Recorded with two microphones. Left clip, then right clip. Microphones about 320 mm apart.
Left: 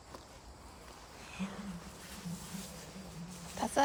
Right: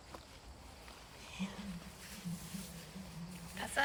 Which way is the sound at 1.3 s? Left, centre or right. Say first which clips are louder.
Left 2 dB; centre.